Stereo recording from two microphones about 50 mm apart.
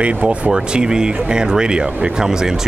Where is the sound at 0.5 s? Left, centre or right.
Centre.